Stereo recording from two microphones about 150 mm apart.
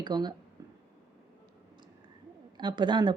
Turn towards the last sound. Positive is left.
turn(degrees=-30)  # may be behind; listen again after turning